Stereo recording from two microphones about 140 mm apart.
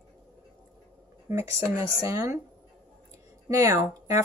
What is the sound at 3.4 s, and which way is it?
Speech, 20° right (ahead or behind).